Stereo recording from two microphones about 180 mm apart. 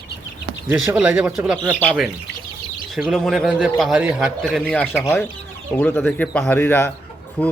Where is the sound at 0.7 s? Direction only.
10° right (ahead or behind).